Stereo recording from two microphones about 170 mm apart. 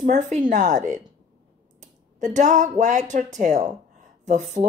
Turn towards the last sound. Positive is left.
turn(degrees=-45)  # may be behind; listen again after turning